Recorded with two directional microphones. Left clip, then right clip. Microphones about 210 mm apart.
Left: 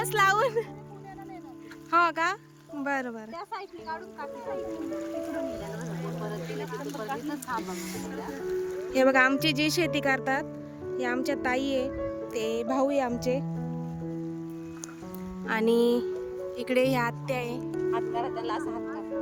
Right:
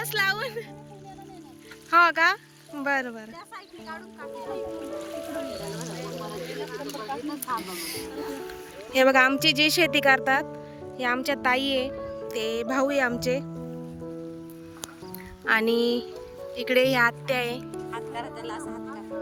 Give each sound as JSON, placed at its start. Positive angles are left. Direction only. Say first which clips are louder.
{"t": 0.0, "sound": "a sound", "louder": "left 3 dB", "side_deg": 15}
{"t": 1.9, "sound": "speech", "louder": "right 5 dB", "side_deg": 5}
{"t": 4.9, "sound": "music", "louder": "even", "side_deg": 45}
{"t": 6.8, "sound": "speech", "louder": "right 1 dB", "side_deg": 5}
{"t": 7.6, "sound": "music", "louder": "right 2 dB", "side_deg": 5}
{"t": 8.9, "sound": "speech", "louder": "right 3 dB", "side_deg": 5}
{"t": 15.4, "sound": "music", "louder": "right 2 dB", "side_deg": 10}
{"t": 16.6, "sound": "speech", "louder": "right 5 dB", "side_deg": 5}
{"t": 17.7, "sound": "music", "louder": "left 5 dB", "side_deg": 55}